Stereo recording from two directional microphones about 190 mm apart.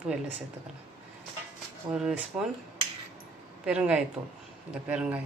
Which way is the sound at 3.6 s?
5° right (ahead or behind).